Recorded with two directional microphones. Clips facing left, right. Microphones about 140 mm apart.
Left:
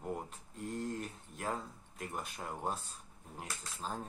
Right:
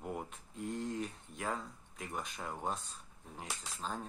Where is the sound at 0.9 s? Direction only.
45° left (ahead or behind).